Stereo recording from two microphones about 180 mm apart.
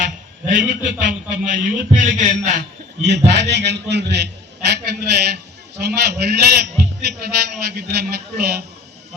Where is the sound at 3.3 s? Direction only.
70° right (ahead or behind).